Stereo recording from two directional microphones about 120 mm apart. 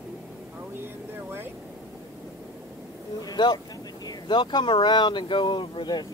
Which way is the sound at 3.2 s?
35° left (ahead or behind).